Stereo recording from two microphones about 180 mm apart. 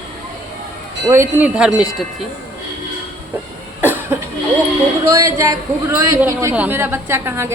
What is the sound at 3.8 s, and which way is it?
Cough, 10° right (ahead or behind).